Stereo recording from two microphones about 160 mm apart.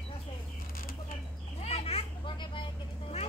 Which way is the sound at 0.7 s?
65° left (ahead or behind).